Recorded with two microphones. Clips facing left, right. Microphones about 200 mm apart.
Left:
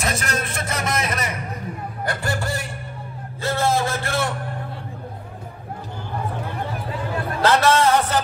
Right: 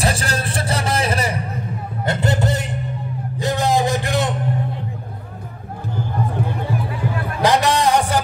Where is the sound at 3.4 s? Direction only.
15° right (ahead or behind).